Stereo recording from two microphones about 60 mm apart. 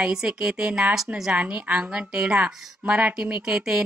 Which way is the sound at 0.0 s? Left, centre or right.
Centre.